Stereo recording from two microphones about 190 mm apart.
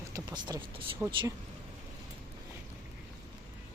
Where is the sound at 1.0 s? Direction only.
5° right (ahead or behind).